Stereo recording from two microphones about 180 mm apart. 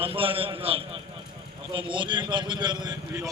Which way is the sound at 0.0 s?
30° right (ahead or behind).